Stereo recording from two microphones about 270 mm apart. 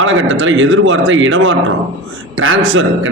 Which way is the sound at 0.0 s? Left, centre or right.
Right.